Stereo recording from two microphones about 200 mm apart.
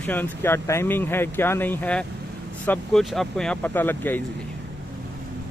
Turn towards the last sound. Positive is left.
turn(degrees=10)  # may be behind; listen again after turning